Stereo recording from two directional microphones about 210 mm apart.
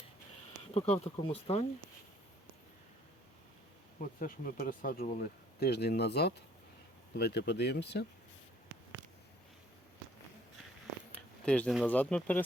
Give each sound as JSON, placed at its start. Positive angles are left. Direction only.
{"t": 0.7, "sound": "speech", "side_deg": 30}
{"t": 4.0, "sound": "speech", "side_deg": 45}
{"t": 11.1, "sound": "speech", "side_deg": 5}